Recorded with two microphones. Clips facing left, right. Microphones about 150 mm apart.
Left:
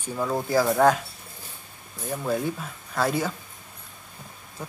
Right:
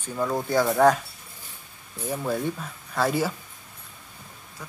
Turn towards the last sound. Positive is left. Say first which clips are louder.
# right 1 dB
turn(degrees=0)  # may be behind; listen again after turning